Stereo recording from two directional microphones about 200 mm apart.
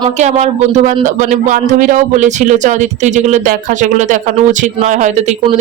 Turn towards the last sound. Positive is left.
turn(degrees=-35)  # may be behind; listen again after turning